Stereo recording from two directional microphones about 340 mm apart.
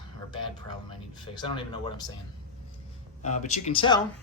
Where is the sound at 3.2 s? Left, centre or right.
Centre.